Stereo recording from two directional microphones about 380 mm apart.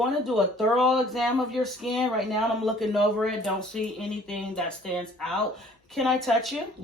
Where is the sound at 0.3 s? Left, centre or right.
Centre.